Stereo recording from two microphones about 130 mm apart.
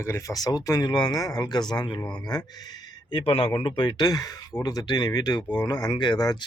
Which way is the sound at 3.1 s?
45° left (ahead or behind).